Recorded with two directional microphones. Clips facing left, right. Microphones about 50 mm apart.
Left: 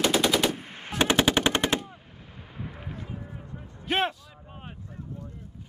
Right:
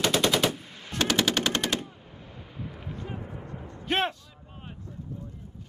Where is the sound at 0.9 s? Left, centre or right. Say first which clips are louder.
Left 3 dB; left.